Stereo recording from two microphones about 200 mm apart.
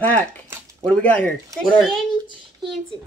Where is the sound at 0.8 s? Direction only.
5° left (ahead or behind).